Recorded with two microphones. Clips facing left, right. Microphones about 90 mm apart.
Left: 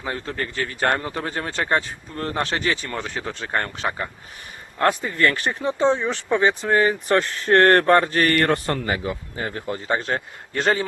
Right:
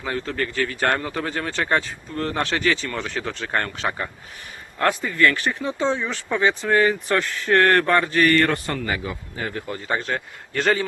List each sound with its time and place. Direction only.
0.0 s speech: 25° left (ahead or behind)
4.8 s speech: 35° left (ahead or behind)
5.5 s speech: 20° left (ahead or behind)
7.4 s speech: 35° left (ahead or behind)